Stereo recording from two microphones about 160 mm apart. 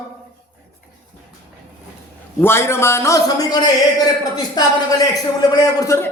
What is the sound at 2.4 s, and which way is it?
A man's voice, 15° left (ahead or behind).